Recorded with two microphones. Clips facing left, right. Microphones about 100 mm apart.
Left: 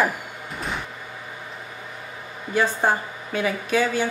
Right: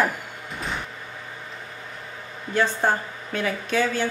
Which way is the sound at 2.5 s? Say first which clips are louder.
Left 1 dB; 10° left (ahead or behind).